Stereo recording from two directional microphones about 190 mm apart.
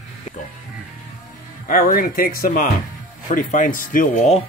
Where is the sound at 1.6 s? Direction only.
50° left (ahead or behind).